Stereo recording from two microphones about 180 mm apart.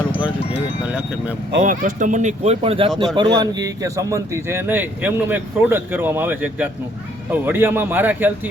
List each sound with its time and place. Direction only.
0.9 s speech: 10° right (ahead or behind)
1.5 s speech: 50° right (ahead or behind); by 2.9 s 30° right (ahead or behind)
3.2 s speech: 20° right (ahead or behind)